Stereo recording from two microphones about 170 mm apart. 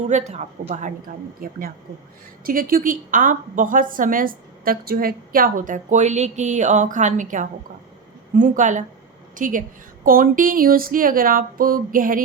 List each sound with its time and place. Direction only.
0.1 s a woman's voice: 45° right (ahead or behind)